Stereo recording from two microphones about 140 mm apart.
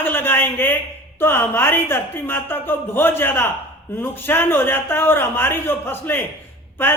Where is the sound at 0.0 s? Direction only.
15° left (ahead or behind).